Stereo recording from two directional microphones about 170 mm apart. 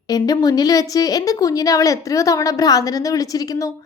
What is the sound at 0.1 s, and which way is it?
A woman's voice, 20° left (ahead or behind).